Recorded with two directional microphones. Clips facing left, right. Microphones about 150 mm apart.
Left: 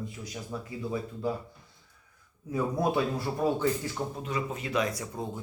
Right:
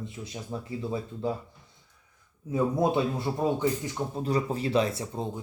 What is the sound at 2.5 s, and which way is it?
Speech, 20° right (ahead or behind).